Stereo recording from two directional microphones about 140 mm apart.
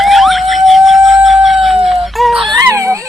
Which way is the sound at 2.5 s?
20° right (ahead or behind).